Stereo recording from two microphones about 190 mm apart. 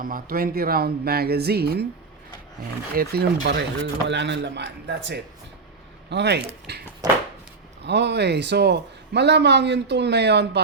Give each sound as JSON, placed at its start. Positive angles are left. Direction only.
{"t": 0.0, "sound": "a man's voice", "side_deg": -50}
{"t": 2.9, "sound": "a man's voice", "side_deg": -55}